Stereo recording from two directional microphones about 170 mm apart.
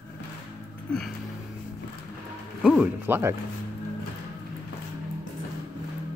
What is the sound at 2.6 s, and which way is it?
Speech, 10° right (ahead or behind).